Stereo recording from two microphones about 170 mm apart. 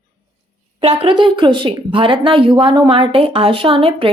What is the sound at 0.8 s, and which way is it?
Speech, 35° right (ahead or behind).